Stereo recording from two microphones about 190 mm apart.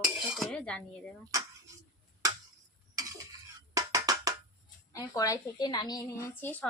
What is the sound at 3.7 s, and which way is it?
Music, 20° right (ahead or behind).